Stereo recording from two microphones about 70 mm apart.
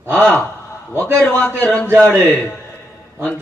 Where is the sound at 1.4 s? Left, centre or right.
Centre.